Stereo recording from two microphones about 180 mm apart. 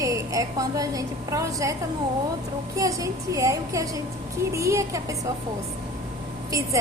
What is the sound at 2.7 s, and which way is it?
A woman's voice, 20° right (ahead or behind).